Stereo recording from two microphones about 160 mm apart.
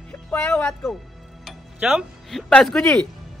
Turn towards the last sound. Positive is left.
turn(degrees=5)  # may be behind; listen again after turning